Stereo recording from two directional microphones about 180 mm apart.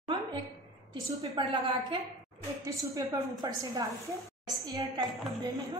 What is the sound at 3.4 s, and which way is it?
A woman's voice, 20° right (ahead or behind).